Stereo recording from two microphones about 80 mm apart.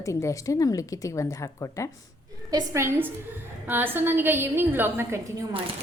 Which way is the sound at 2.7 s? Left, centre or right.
Right.